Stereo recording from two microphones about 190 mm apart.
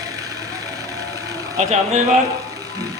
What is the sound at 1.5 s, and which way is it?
Speech, 35° right (ahead or behind).